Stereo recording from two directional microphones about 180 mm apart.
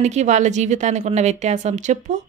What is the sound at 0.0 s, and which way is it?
Speech, 40° right (ahead or behind).